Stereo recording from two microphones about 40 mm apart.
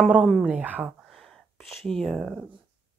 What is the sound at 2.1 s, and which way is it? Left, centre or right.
Speech, centre.